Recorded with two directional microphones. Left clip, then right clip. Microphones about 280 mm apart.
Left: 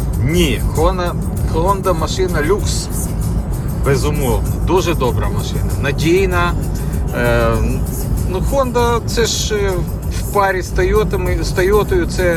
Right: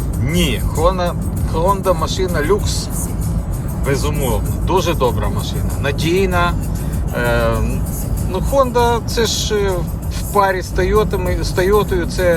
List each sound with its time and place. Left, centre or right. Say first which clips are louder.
0.3 s speech: left 3 dB; centre
3.8 s speech: left 2 dB; centre